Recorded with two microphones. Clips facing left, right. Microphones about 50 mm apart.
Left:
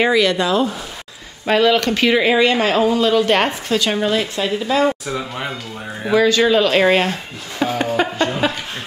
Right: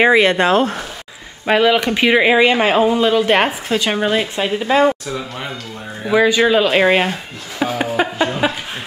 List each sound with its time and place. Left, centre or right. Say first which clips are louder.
0.0 s speech: right 3 dB; right
1.4 s speech: right 1 dB; centre
5.0 s speech: left 1 dB; centre
6.1 s speech: right 1 dB; centre